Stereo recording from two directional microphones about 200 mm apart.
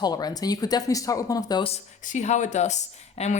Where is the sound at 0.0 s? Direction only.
20° left (ahead or behind).